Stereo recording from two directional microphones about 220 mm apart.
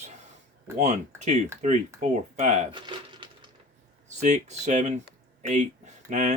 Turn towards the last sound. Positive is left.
turn(degrees=-30)  # may be behind; listen again after turning